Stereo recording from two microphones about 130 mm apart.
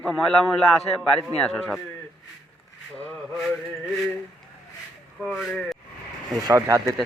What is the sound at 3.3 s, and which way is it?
Speech, centre (ahead or behind).